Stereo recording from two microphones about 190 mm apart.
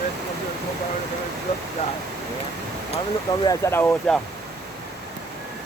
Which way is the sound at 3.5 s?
15° left (ahead or behind).